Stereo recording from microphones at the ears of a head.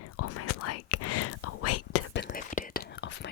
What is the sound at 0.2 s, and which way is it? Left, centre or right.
Whispering, left.